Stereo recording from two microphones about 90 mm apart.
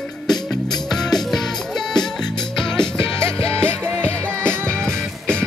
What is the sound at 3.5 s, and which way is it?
Music, 30° right (ahead or behind).